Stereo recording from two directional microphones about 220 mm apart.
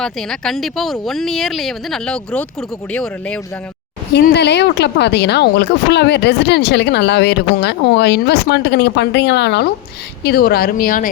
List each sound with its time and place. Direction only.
0.0 s speech: centre (ahead or behind)
4.1 s a woman's voice: 50° left (ahead or behind)